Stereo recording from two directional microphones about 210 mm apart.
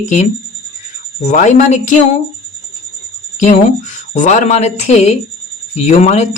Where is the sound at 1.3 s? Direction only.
35° left (ahead or behind).